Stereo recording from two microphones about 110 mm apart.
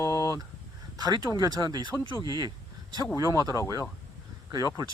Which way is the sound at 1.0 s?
35° right (ahead or behind).